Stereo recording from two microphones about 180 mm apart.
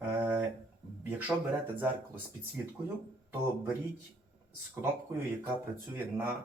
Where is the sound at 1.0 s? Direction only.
10° right (ahead or behind).